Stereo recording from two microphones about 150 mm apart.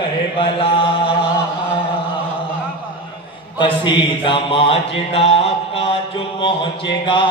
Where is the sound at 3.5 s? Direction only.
30° left (ahead or behind).